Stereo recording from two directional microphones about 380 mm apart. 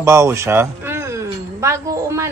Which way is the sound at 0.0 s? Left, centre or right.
Centre.